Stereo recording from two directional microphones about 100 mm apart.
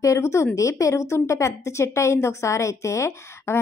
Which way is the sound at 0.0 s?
30° left (ahead or behind).